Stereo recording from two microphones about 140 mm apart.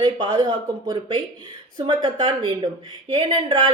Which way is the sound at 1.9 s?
35° right (ahead or behind).